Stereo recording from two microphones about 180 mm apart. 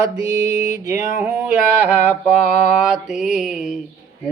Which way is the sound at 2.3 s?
40° left (ahead or behind).